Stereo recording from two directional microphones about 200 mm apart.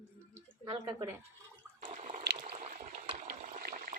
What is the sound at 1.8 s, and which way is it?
Water, 35° right (ahead or behind).